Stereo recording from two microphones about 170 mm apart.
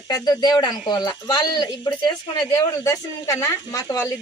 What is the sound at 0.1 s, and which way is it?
Speech, 25° left (ahead or behind).